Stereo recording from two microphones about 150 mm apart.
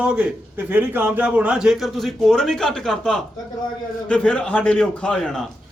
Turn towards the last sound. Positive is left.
turn(degrees=5)  # may be behind; listen again after turning